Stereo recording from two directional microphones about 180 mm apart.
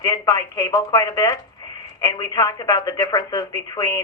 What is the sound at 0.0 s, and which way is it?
A woman's voice, 20° left (ahead or behind).